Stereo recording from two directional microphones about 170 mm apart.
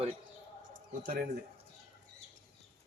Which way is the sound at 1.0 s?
55° right (ahead or behind).